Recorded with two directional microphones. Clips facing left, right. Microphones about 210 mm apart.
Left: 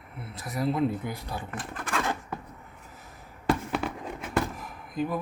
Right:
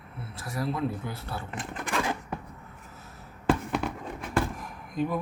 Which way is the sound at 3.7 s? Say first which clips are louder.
Even; centre (ahead or behind).